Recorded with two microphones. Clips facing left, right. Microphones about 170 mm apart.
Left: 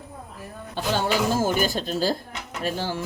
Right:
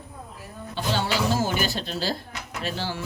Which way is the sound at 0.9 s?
50° left (ahead or behind).